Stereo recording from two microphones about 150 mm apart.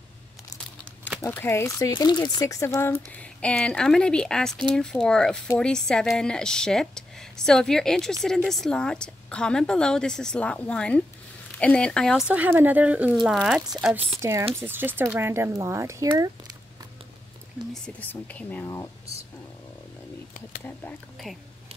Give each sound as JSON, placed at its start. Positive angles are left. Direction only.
{"t": 1.2, "sound": "speech", "side_deg": 15}
{"t": 14.5, "sound": "speech", "side_deg": -15}
{"t": 17.8, "sound": "speech", "side_deg": 10}